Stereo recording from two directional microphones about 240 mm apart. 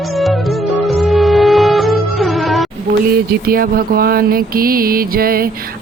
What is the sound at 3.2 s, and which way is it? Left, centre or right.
Mantra, right.